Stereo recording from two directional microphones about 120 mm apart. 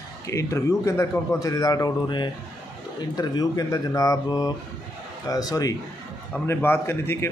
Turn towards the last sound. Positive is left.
turn(degrees=20)  # may be behind; listen again after turning